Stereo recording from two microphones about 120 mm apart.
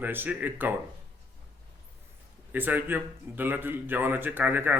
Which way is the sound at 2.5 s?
15° right (ahead or behind).